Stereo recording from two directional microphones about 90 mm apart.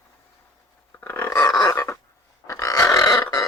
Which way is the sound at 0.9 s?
20° left (ahead or behind).